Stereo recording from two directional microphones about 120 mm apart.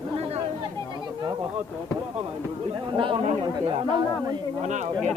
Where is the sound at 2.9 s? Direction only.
45° right (ahead or behind).